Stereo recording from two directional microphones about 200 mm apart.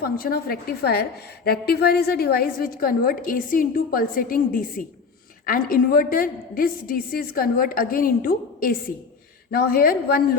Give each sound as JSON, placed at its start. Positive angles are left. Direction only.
{"t": 0.0, "sound": "a woman's voice", "side_deg": 45}